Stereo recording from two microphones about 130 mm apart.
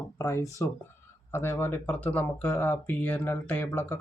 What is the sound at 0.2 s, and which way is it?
Speech, 20° left (ahead or behind).